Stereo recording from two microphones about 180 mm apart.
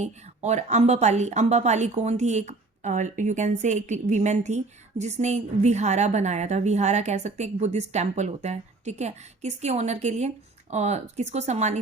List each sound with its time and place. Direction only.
0.0 s a woman's voice: 40° right (ahead or behind)